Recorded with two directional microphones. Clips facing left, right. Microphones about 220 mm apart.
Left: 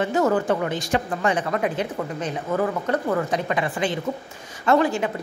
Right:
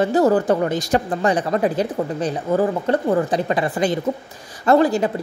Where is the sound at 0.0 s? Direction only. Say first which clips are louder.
Right 5 dB; 35° right (ahead or behind).